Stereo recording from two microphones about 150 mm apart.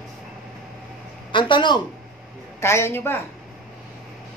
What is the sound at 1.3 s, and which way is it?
Speech, 30° left (ahead or behind).